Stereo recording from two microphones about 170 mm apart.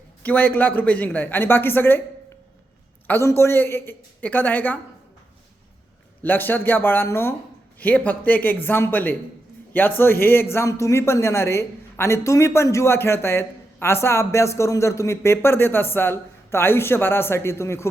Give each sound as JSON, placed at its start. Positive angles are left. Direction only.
{"t": 0.2, "sound": "speech", "side_deg": 10}
{"t": 3.1, "sound": "speech", "side_deg": 15}
{"t": 6.2, "sound": "speech", "side_deg": 10}